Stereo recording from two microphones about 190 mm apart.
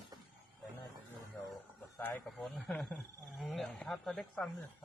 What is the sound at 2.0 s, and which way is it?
Speech, 10° left (ahead or behind).